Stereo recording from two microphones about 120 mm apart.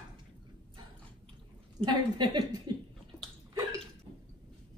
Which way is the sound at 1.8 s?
40° right (ahead or behind).